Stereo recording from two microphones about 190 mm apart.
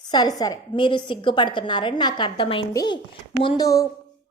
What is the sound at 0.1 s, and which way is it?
A woman's voice, 20° left (ahead or behind).